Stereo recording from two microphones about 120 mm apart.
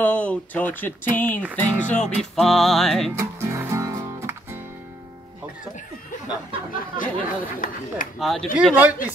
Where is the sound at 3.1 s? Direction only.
20° right (ahead or behind).